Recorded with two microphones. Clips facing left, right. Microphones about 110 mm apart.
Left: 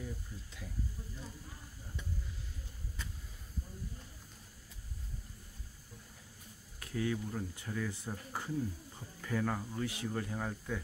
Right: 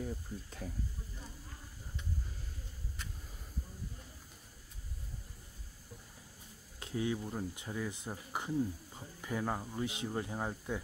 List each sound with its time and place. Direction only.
0.0 s speech: 45° right (ahead or behind)
6.8 s speech: 20° right (ahead or behind)